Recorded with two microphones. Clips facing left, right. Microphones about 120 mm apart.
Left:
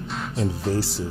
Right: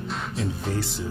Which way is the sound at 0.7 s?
35° left (ahead or behind).